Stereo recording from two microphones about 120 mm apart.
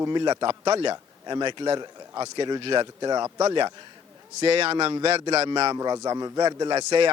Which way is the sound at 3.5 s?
40° right (ahead or behind).